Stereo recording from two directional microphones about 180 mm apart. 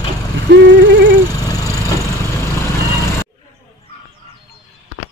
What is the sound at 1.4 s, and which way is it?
Vehicle, 20° left (ahead or behind).